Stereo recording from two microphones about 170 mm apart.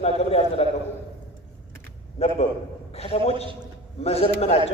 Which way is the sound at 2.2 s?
40° left (ahead or behind).